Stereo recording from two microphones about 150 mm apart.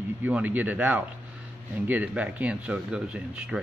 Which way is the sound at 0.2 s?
10° right (ahead or behind).